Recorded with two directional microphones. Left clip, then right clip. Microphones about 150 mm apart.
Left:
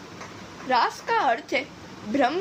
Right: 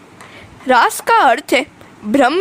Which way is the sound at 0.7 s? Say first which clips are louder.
Right 11 dB; 90° right.